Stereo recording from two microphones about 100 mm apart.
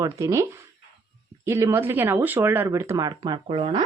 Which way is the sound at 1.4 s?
25° right (ahead or behind).